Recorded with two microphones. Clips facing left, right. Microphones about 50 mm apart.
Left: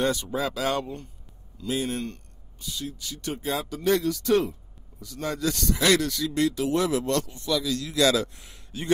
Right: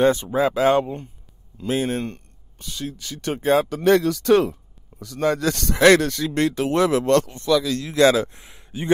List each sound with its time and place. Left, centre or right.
0.0 s speech: right
1.6 s a man's voice: right
2.6 s speech: right
7.7 s a man's voice: right